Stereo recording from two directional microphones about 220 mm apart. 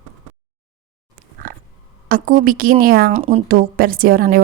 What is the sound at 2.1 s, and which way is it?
A woman's voice, 40° right (ahead or behind).